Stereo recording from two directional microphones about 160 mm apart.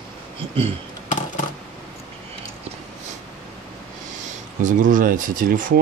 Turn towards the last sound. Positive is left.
turn(degrees=-60)  # may be behind; listen again after turning